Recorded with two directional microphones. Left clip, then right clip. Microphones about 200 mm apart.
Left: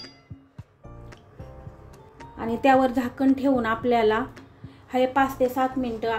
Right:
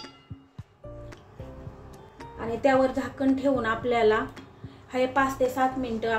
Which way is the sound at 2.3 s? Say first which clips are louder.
Left 3 dB; 30° left (ahead or behind).